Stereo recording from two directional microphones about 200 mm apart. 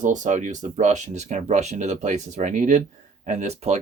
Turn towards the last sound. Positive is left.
turn(degrees=-35)  # may be behind; listen again after turning